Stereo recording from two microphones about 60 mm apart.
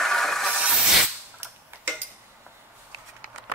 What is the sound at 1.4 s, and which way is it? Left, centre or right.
Tick-tock, right.